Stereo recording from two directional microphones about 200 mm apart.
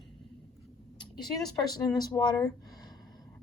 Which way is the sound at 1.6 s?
20° left (ahead or behind).